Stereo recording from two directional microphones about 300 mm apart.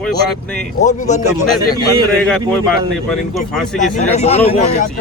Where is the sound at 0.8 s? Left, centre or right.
Left.